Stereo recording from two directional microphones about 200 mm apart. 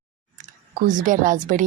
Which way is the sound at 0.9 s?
40° right (ahead or behind).